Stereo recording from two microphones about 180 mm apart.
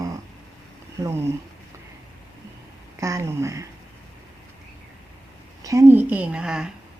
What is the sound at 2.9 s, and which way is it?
Speech, 15° right (ahead or behind).